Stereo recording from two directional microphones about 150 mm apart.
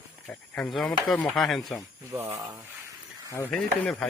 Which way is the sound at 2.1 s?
20° right (ahead or behind).